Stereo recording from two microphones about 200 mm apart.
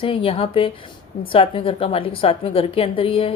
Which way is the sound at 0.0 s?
25° left (ahead or behind).